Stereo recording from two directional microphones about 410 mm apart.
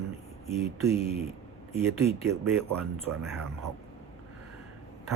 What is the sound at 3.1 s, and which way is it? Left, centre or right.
Speech, right.